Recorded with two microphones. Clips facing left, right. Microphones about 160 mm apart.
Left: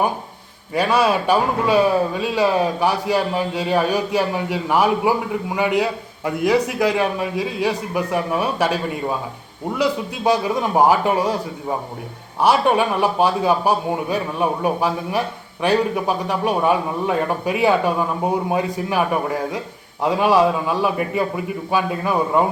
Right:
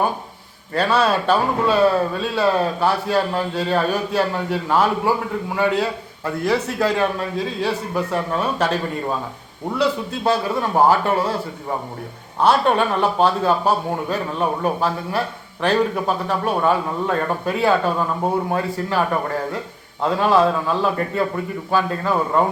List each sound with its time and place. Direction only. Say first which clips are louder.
0.7 s speech: left 1 dB; 10° left (ahead or behind)
12.4 s speech: even; 10° left (ahead or behind)